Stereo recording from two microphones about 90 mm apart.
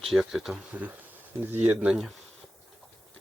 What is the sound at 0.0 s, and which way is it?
Speech, centre (ahead or behind).